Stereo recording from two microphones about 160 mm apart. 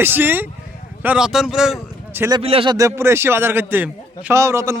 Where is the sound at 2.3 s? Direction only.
35° right (ahead or behind).